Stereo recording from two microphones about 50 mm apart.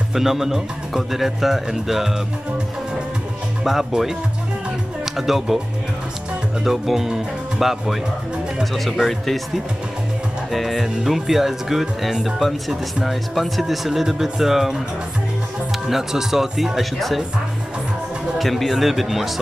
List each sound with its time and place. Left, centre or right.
0.1 s speech: centre
3.6 s speech: centre
5.1 s speech: centre
6.6 s speech: centre
10.5 s speech: centre
15.9 s speech: centre
18.4 s speech: centre